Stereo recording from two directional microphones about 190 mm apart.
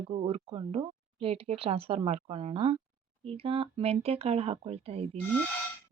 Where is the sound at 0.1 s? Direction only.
30° right (ahead or behind).